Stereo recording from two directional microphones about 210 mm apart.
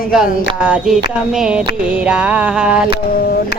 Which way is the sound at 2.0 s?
5° right (ahead or behind).